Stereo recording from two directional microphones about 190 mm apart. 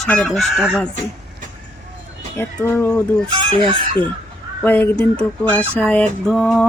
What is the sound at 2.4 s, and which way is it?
Fowl, 10° left (ahead or behind).